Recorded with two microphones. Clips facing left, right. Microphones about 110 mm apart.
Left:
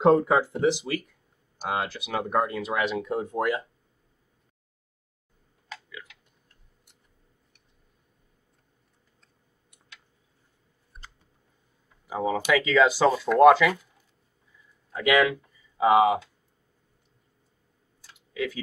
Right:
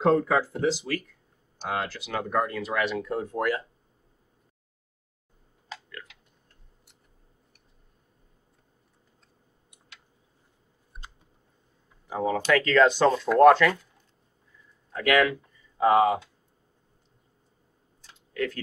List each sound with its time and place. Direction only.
0.0 s speech: 15° left (ahead or behind)
12.1 s speech: 5° left (ahead or behind)
14.9 s speech: 15° left (ahead or behind)
18.3 s speech: 5° left (ahead or behind)